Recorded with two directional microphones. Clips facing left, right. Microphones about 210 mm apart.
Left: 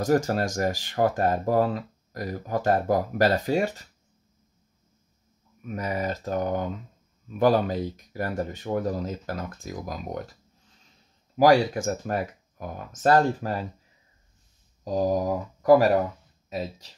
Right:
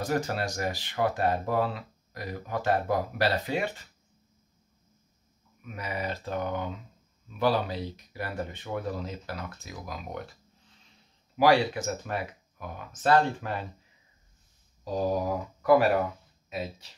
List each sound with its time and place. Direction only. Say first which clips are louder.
0.0 s speech: left 6 dB; 45° left (ahead or behind)
5.6 s speech: left 6 dB; 45° left (ahead or behind)
11.3 s speech: left 4 dB; 45° left (ahead or behind)
14.9 s speech: left 4 dB; 40° left (ahead or behind)